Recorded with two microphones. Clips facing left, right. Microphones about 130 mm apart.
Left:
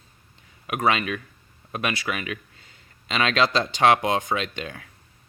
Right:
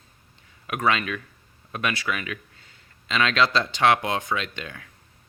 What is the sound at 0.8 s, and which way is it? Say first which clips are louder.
Speech: left 1 dB; 20° left (ahead or behind).